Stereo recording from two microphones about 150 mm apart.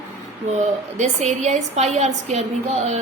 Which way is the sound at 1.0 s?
50° right (ahead or behind).